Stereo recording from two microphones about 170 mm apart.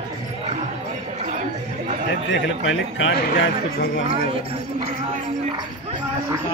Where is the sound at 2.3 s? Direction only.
90° left.